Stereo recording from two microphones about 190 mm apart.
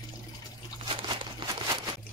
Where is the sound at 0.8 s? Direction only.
25° right (ahead or behind).